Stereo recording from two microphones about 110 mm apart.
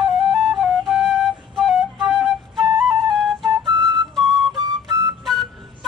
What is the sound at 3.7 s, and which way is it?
Flute, 45° right (ahead or behind).